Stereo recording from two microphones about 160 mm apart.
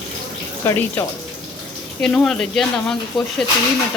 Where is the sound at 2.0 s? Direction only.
5° left (ahead or behind).